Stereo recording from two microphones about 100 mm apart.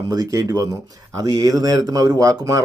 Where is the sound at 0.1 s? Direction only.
35° right (ahead or behind).